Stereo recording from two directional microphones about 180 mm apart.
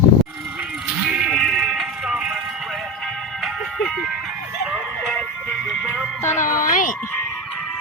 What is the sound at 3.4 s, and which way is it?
Music, centre (ahead or behind).